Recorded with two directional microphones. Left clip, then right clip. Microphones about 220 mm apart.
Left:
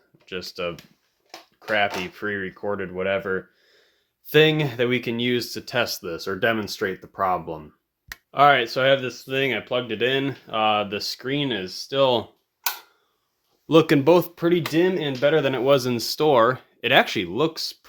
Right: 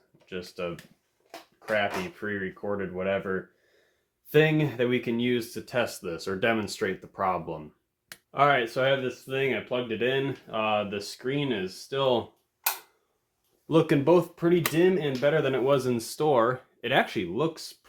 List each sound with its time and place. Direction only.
0.3 s speech: 50° left (ahead or behind)
13.7 s speech: 50° left (ahead or behind)